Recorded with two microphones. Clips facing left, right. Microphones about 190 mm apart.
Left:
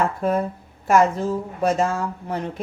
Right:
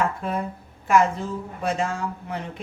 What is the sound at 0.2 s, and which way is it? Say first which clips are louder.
Speech: left 6 dB; 45° left (ahead or behind).